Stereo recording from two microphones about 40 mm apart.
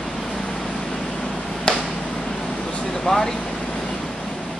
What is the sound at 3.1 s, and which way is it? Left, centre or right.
Speech, left.